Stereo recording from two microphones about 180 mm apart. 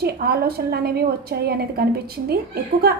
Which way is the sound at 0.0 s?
60° right (ahead or behind).